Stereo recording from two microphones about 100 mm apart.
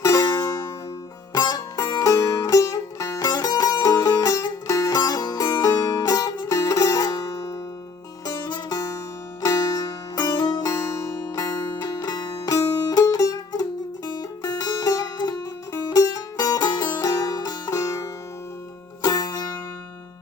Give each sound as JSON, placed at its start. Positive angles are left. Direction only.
{"t": 0.0, "sound": "music", "side_deg": 30}
{"t": 1.3, "sound": "music", "side_deg": 45}
{"t": 8.3, "sound": "music", "side_deg": 45}
{"t": 10.6, "sound": "music", "side_deg": 30}